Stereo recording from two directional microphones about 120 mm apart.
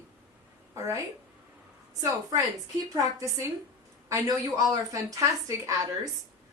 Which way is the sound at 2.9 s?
25° right (ahead or behind).